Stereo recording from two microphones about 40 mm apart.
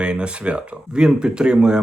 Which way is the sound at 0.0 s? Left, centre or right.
Right.